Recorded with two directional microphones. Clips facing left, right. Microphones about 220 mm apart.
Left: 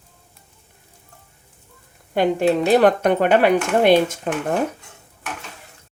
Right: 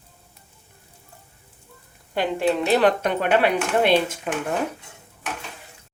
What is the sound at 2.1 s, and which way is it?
Speech, 45° left (ahead or behind).